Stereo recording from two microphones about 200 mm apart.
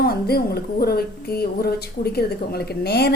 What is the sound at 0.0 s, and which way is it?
A woman's voice, 50° left (ahead or behind).